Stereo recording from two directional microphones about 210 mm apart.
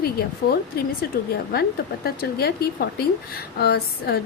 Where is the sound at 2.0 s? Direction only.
45° left (ahead or behind).